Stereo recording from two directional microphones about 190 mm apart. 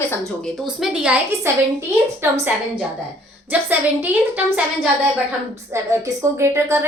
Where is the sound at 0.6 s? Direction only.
5° right (ahead or behind).